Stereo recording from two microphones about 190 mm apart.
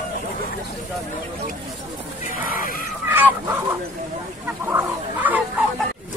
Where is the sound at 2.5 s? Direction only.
50° left (ahead or behind).